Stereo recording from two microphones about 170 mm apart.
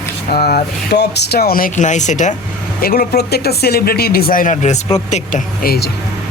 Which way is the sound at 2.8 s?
60° left (ahead or behind).